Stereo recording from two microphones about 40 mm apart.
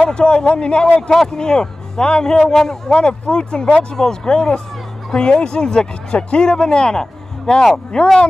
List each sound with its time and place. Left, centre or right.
0.0 s a man's voice: left